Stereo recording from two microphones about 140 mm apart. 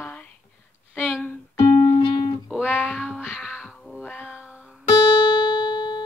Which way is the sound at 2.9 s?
5° right (ahead or behind).